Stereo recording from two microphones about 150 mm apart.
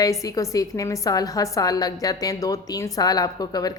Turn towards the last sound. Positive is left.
turn(degrees=25)  # may be behind; listen again after turning